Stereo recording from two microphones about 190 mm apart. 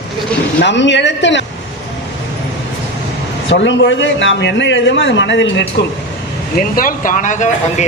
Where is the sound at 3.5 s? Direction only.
75° left (ahead or behind).